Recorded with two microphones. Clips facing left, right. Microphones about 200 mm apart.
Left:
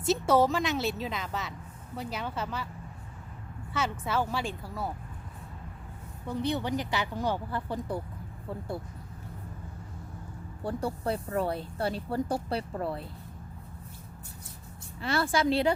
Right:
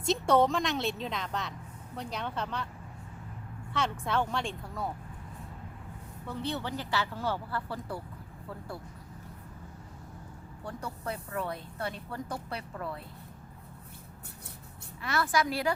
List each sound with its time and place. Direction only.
0.0 s a woman's voice: 5° left (ahead or behind)
3.7 s a woman's voice: 5° left (ahead or behind)
6.2 s a woman's voice: 15° left (ahead or behind)
10.6 s speech: 30° left (ahead or behind)
15.0 s a woman's voice: 30° left (ahead or behind)